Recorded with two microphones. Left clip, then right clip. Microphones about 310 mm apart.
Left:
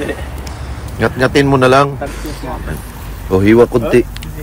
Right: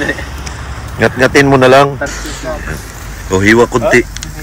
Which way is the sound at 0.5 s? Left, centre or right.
Centre.